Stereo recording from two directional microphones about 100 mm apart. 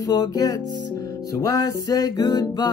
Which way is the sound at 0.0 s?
40° left (ahead or behind).